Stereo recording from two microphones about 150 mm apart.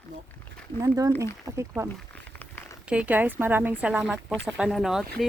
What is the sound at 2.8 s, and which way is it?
Speech, 10° right (ahead or behind).